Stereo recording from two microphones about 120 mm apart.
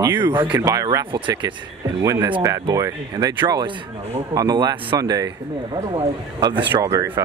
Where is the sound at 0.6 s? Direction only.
25° right (ahead or behind).